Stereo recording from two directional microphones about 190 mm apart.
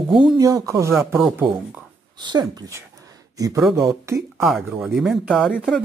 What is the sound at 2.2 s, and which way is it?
Speech, 20° right (ahead or behind).